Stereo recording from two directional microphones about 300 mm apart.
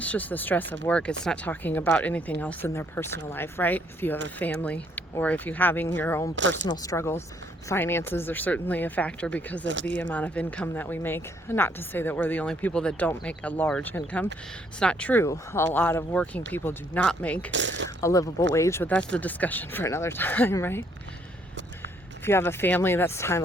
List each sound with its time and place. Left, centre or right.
0.0 s speech: centre
17.5 s speech: right
18.0 s speech: centre
22.2 s speech: centre